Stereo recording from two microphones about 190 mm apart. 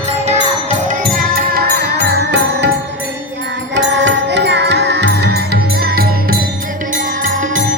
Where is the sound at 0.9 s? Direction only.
45° right (ahead or behind); by 2.6 s 65° right (ahead or behind).